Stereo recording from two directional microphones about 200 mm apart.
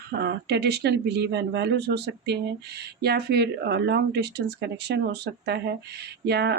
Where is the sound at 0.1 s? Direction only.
55° right (ahead or behind).